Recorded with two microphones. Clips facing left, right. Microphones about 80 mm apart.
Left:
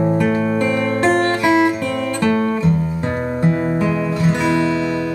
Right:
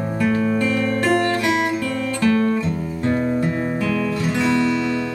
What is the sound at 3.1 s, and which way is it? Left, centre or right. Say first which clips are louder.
Music: right 1 dB; left.